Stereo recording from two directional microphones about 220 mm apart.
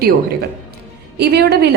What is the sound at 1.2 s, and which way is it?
Speech, 45° right (ahead or behind).